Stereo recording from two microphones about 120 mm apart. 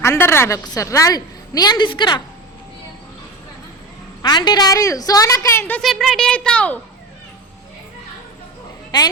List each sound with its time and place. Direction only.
0.0 s a woman's voice: 25° left (ahead or behind); by 2.2 s 40° left (ahead or behind)
4.2 s a woman's voice: 35° left (ahead or behind); by 5.8 s 20° left (ahead or behind)
5.8 s speech: centre (ahead or behind)
8.9 s a woman's voice: 40° left (ahead or behind)